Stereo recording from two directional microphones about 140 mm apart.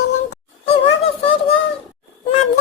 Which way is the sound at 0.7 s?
40° left (ahead or behind).